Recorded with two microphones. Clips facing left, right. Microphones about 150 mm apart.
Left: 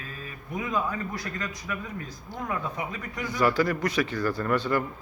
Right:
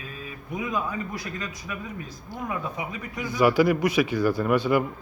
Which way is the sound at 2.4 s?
15° right (ahead or behind).